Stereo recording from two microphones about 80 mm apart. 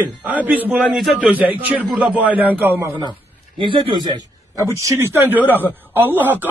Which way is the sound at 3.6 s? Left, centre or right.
Right.